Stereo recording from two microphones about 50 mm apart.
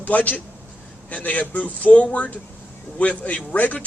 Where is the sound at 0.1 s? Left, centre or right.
Left.